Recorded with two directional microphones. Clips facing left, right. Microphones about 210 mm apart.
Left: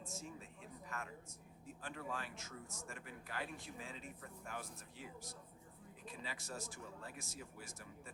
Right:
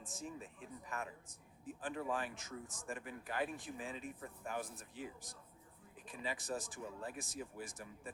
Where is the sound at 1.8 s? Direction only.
15° right (ahead or behind).